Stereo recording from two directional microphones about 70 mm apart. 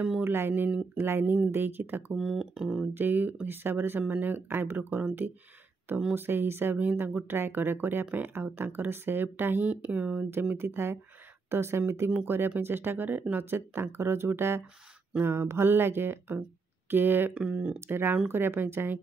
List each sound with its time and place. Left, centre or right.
0.2 s speech: right
2.1 s speech: centre
2.9 s speech: right
10.5 s speech: right
17.3 s speech: centre
17.7 s speech: right